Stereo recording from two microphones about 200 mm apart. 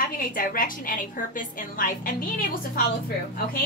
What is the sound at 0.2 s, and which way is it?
A woman's voice, 45° left (ahead or behind).